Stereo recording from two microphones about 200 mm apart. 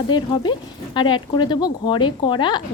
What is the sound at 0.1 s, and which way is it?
Speech, 25° left (ahead or behind).